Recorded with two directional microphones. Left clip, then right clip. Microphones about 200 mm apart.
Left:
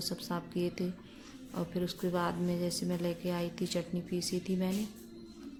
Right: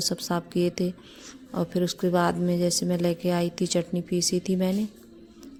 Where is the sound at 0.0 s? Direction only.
40° right (ahead or behind).